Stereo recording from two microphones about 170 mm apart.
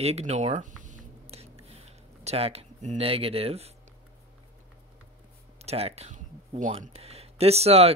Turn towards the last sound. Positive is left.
turn(degrees=-35)  # may be behind; listen again after turning